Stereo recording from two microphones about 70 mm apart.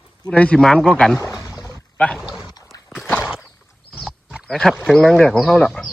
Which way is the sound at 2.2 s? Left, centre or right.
Centre.